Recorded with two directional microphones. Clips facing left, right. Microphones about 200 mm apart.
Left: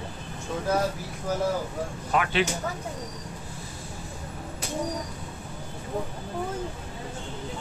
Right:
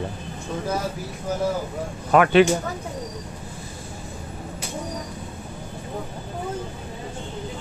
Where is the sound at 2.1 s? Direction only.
55° right (ahead or behind).